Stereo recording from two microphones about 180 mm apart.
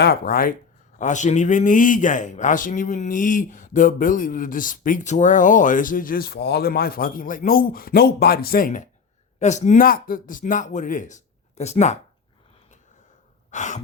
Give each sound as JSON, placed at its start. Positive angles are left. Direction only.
{"t": 0.0, "sound": "a man's voice", "side_deg": 60}
{"t": 0.9, "sound": "a man's voice", "side_deg": 40}
{"t": 13.5, "sound": "sigh", "side_deg": 40}